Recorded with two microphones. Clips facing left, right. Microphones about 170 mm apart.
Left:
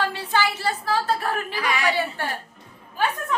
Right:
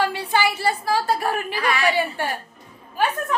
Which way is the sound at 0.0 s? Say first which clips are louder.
Right 3 dB; 10° right (ahead or behind).